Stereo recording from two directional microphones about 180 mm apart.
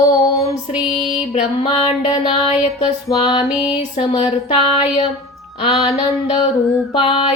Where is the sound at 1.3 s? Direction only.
35° left (ahead or behind).